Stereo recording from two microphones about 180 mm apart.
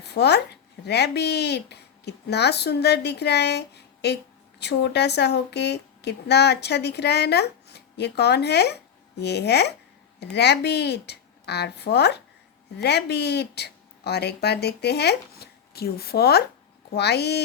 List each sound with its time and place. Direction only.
0.0 s a woman's voice: 65° left (ahead or behind)